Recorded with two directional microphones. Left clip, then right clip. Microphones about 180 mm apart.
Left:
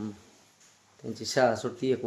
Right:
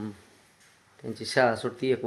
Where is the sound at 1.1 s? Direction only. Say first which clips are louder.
Right 1 dB; 10° right (ahead or behind).